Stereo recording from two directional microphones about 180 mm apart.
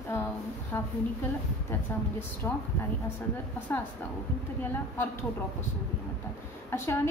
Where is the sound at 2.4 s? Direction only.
10° left (ahead or behind).